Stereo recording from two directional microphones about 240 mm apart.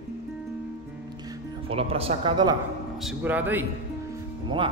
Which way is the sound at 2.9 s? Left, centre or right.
Centre.